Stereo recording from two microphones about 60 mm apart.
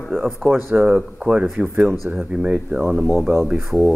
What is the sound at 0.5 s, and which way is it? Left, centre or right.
Speech, right.